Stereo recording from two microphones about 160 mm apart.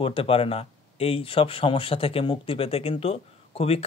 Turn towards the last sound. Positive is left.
turn(degrees=35)  # may be behind; listen again after turning